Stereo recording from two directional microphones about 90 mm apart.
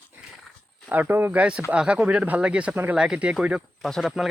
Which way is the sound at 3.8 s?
Centre (ahead or behind).